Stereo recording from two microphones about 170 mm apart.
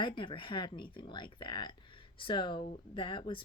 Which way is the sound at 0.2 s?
30° left (ahead or behind).